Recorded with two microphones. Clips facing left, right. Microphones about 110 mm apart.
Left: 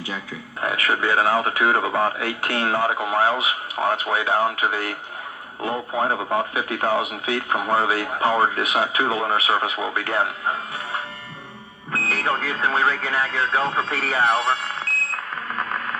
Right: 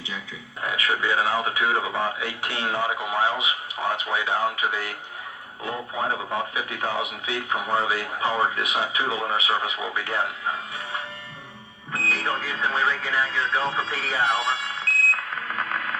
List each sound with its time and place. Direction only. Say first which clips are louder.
0.6 s speech: left 3 dB; 55° left (ahead or behind)
11.9 s speech: left 3 dB; 55° left (ahead or behind)